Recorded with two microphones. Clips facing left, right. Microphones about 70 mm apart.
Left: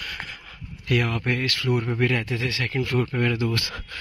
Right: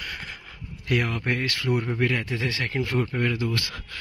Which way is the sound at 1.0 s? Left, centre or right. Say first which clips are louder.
Left 1 dB; centre.